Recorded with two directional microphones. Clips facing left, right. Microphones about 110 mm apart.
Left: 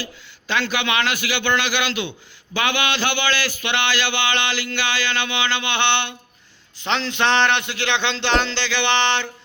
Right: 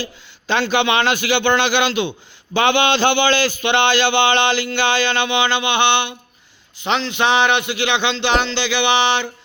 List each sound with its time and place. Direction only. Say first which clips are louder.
0.0 s a man's voice: right 4 dB; 25° right (ahead or behind); by 9.3 s 10° right (ahead or behind)